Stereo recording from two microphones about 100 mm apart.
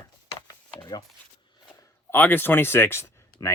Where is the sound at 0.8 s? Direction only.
50° left (ahead or behind).